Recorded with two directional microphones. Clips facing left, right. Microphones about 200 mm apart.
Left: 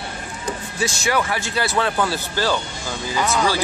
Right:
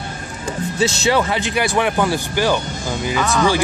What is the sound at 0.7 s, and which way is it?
Speech, 25° right (ahead or behind).